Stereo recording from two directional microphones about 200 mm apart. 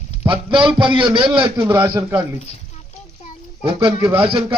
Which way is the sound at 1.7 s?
10° right (ahead or behind).